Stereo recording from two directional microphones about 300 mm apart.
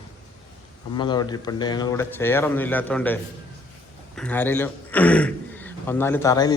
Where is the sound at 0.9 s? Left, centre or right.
Centre.